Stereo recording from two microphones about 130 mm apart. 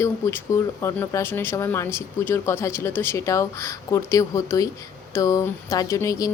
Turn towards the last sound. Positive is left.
turn(degrees=25)  # may be behind; listen again after turning